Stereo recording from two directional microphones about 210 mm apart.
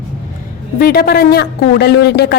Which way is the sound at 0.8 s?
45° left (ahead or behind).